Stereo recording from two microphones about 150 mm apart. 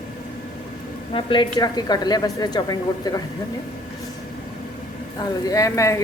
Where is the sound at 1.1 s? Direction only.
35° left (ahead or behind).